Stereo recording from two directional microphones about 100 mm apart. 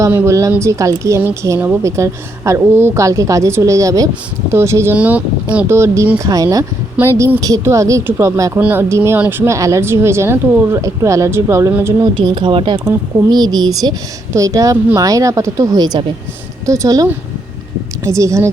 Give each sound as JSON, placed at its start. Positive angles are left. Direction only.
{"t": 0.1, "sound": "a woman's voice", "side_deg": -30}
{"t": 4.9, "sound": "speech", "side_deg": -15}
{"t": 5.7, "sound": "a woman's voice", "side_deg": -30}
{"t": 8.5, "sound": "speech", "side_deg": -20}
{"t": 12.1, "sound": "speech", "side_deg": -55}
{"t": 13.3, "sound": "speech", "side_deg": -45}
{"t": 14.3, "sound": "a woman's voice", "side_deg": -35}
{"t": 16.6, "sound": "a woman's voice", "side_deg": -30}